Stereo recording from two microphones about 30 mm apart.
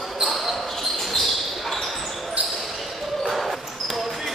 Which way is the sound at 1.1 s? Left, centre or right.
Centre.